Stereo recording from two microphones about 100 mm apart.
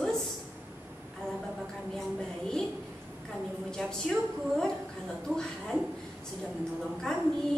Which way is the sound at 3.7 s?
5° left (ahead or behind).